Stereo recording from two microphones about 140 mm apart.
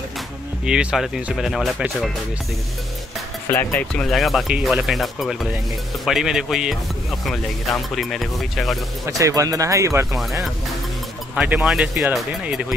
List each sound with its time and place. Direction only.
0.7 s speech: 5° right (ahead or behind)
3.4 s speech: 15° left (ahead or behind)
3.9 s speech: 5° left (ahead or behind)
7.9 s speech: centre (ahead or behind)
9.0 s speech: 25° right (ahead or behind)
11.3 s speech: 10° right (ahead or behind)